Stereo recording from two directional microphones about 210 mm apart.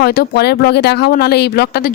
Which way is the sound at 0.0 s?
50° left (ahead or behind).